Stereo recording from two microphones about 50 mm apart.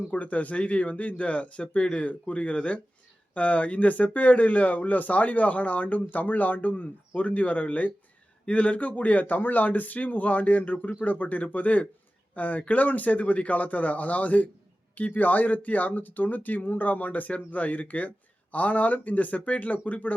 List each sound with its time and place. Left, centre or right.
0.1 s speech: left